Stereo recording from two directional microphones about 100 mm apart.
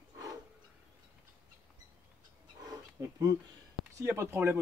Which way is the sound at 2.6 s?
40° right (ahead or behind).